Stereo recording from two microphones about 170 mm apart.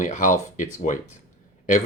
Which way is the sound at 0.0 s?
50° left (ahead or behind).